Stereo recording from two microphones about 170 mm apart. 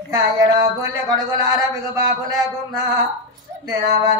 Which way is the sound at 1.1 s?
25° right (ahead or behind).